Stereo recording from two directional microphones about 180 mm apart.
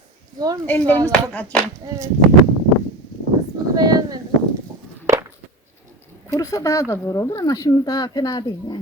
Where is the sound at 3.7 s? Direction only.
20° right (ahead or behind).